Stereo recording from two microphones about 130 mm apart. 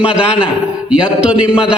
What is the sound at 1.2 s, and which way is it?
Speech, 10° right (ahead or behind).